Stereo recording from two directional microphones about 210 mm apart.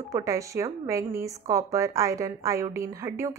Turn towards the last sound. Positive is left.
turn(degrees=-15)  # may be behind; listen again after turning